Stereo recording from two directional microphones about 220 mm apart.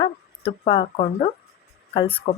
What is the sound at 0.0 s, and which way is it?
A woman's voice, 25° left (ahead or behind).